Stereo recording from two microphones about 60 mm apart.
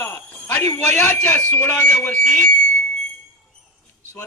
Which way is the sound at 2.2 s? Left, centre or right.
Centre.